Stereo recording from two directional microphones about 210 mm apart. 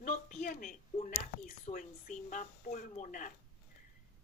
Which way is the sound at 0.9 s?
30° left (ahead or behind).